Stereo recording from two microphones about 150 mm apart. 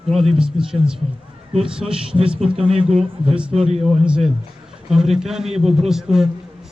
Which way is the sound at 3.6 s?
45° right (ahead or behind).